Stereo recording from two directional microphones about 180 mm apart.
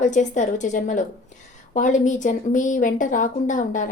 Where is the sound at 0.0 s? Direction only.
45° left (ahead or behind).